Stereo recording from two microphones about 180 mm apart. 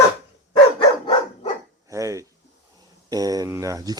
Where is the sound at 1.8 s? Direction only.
20° right (ahead or behind).